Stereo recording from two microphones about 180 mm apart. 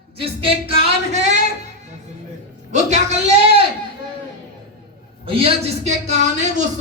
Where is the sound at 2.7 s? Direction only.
40° right (ahead or behind).